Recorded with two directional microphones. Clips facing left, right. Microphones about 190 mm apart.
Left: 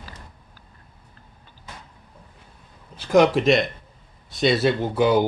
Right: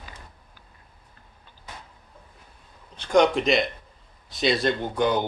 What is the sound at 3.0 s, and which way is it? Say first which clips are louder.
A man's voice: left 3 dB; 5° left (ahead or behind).